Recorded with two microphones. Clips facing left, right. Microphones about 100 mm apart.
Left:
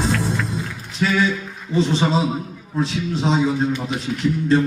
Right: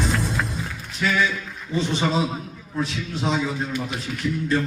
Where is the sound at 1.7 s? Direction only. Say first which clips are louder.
Left 4 dB; 30° left (ahead or behind).